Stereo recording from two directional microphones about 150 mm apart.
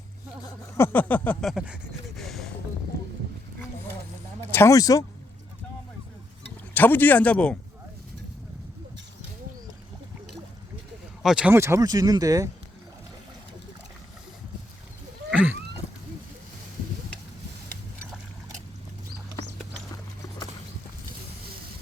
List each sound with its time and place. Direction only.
0.8 s speech: 10° left (ahead or behind)
1.5 s a sound: 5° right (ahead or behind)
4.5 s speech: 20° left (ahead or behind)
6.7 s speech: 10° left (ahead or behind)
11.2 s speech: 5° right (ahead or behind); by 12.5 s 25° right (ahead or behind)
15.3 s a sound: 10° right (ahead or behind)